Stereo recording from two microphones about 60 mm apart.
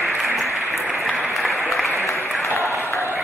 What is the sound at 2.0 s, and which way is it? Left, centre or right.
Applause, left.